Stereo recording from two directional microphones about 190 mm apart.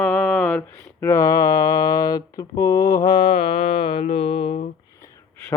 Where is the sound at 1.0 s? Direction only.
15° left (ahead or behind).